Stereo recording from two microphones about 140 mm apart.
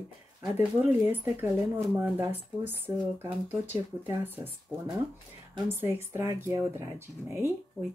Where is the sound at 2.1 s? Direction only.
15° right (ahead or behind).